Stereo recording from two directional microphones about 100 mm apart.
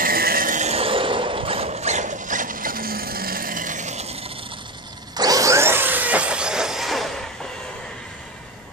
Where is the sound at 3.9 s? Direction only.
90° right; by 4.7 s 60° right (ahead or behind).